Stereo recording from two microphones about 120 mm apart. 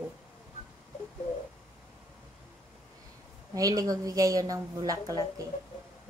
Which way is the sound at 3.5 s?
30° right (ahead or behind).